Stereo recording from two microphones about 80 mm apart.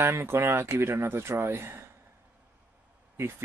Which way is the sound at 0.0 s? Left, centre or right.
Right.